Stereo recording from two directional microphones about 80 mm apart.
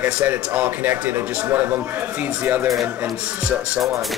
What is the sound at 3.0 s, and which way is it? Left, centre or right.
Speech, centre.